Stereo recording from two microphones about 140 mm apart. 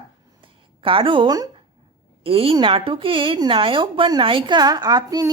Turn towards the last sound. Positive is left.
turn(degrees=-25)  # may be behind; listen again after turning